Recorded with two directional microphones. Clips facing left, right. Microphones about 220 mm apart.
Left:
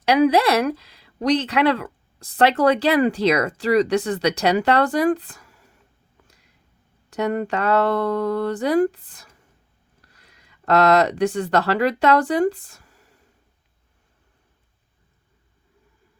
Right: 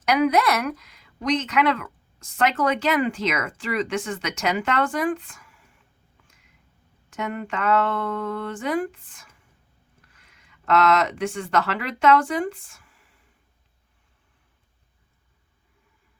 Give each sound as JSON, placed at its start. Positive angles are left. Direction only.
{"t": 0.0, "sound": "speech", "side_deg": 30}
{"t": 6.2, "sound": "a sound", "side_deg": 35}
{"t": 7.1, "sound": "speech", "side_deg": 35}